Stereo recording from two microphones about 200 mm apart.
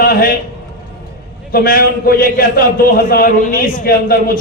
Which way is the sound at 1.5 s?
50° left (ahead or behind).